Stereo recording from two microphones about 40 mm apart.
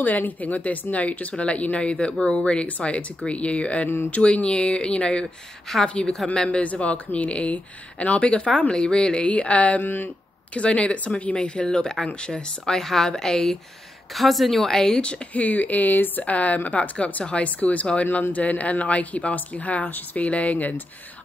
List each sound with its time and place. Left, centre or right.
0.0 s speech: left
12.7 s a woman's voice: centre
14.1 s a woman's voice: centre; by 15.2 s left
15.3 s speech: left
17.5 s speech: left